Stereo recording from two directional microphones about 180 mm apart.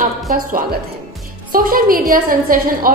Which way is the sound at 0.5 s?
50° right (ahead or behind).